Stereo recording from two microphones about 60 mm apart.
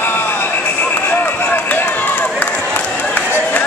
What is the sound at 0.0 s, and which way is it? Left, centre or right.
Vehicle, left.